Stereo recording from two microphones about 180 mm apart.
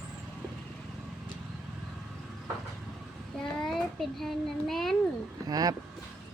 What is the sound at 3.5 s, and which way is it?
Child singing, centre (ahead or behind).